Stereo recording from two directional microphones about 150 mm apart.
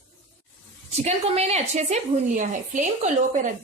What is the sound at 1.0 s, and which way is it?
A woman's voice, 45° right (ahead or behind).